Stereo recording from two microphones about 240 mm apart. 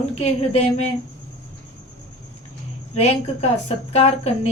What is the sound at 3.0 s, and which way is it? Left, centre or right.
A woman's voice, left.